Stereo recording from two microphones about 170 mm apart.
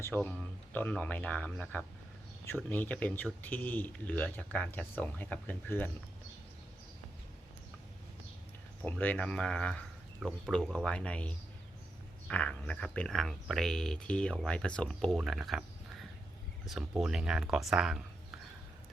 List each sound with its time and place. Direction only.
0.0 s speech: 10° left (ahead or behind)
8.8 s speech: 10° left (ahead or behind)